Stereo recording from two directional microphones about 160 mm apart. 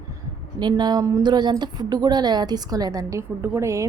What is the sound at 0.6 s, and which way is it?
A woman's voice, 25° right (ahead or behind).